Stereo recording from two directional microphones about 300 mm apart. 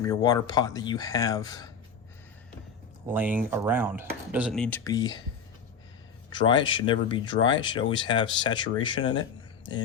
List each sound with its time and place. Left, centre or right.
0.0 s speech: centre
3.1 s speech: centre
6.3 s speech: centre